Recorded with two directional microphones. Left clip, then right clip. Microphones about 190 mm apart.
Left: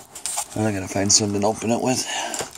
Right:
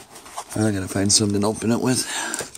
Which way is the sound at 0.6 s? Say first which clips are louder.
Left 1 dB; 35° right (ahead or behind).